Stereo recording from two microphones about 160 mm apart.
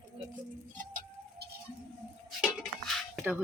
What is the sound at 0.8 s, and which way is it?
Bird, 55° right (ahead or behind).